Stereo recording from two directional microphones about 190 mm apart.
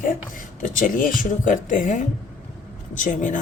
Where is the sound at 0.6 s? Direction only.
45° left (ahead or behind).